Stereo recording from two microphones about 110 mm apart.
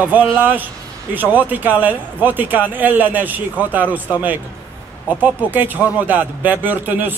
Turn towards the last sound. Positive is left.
turn(degrees=-15)  # may be behind; listen again after turning